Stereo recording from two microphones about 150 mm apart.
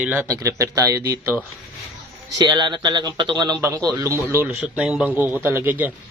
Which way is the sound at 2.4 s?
30° right (ahead or behind).